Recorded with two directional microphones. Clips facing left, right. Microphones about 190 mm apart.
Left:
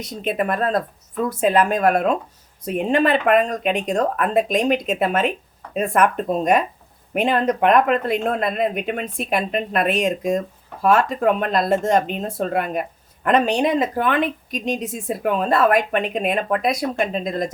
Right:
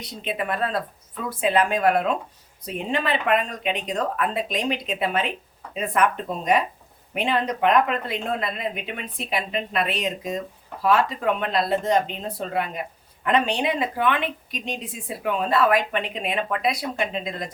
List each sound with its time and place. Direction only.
0.0 s speech: 45° left (ahead or behind)